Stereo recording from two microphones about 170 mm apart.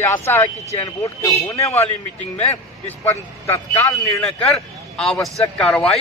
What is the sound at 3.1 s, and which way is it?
Speech, 15° left (ahead or behind).